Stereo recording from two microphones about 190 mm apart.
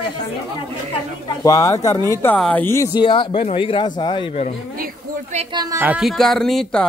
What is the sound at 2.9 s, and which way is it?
Speech, 25° left (ahead or behind).